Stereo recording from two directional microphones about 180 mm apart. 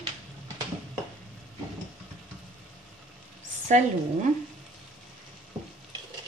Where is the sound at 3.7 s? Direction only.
45° right (ahead or behind).